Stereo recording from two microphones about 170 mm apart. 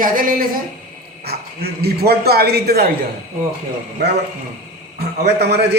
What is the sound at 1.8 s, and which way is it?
A man's voice, 70° right (ahead or behind).